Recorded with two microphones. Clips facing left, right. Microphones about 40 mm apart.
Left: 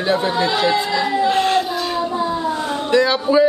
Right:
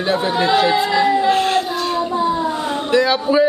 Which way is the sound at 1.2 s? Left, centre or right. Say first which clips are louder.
Right 1 dB; centre.